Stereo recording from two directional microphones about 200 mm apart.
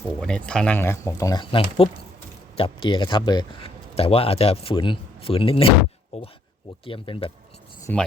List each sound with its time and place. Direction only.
0.2 s speech: 5° left (ahead or behind); by 7.3 s 25° left (ahead or behind)
7.9 s speech: 10° left (ahead or behind)